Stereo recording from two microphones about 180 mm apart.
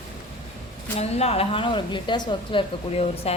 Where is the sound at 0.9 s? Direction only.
35° left (ahead or behind).